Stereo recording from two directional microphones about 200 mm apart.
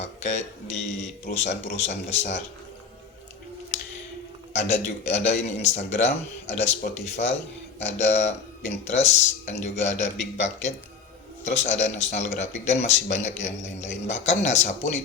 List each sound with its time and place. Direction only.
0.0 s speech: 35° left (ahead or behind)
4.5 s speech: 35° left (ahead or behind)